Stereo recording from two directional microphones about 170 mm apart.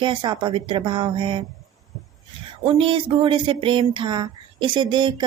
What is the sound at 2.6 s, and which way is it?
Speech, 30° right (ahead or behind).